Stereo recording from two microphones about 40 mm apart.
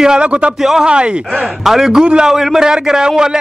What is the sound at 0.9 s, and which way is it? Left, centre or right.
Speech, right.